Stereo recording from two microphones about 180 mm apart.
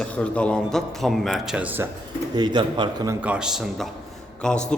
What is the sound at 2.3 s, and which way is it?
Speech, 25° right (ahead or behind).